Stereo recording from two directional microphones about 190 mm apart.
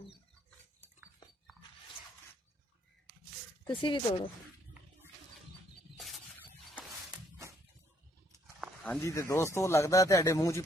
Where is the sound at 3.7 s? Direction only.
25° left (ahead or behind).